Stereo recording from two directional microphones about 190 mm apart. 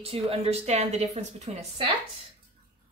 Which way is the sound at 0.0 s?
30° right (ahead or behind).